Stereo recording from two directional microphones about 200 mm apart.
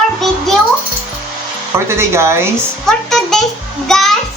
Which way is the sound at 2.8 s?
Centre (ahead or behind).